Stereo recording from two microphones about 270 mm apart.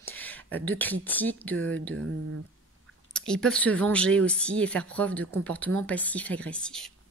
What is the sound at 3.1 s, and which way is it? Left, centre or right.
Speech, centre.